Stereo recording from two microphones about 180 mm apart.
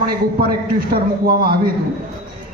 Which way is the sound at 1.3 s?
55° right (ahead or behind).